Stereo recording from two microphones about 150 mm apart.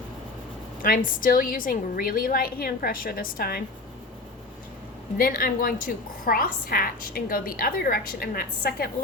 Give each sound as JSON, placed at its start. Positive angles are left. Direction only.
{"t": 0.8, "sound": "a woman's voice", "side_deg": 65}
{"t": 5.1, "sound": "a woman's voice", "side_deg": 75}